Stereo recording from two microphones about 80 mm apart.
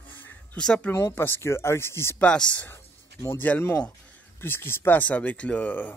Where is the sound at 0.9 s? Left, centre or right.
Left.